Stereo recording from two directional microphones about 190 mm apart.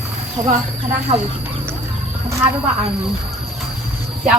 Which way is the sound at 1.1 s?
25° right (ahead or behind).